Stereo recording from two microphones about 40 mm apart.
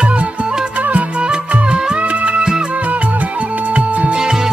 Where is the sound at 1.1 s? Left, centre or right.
Right.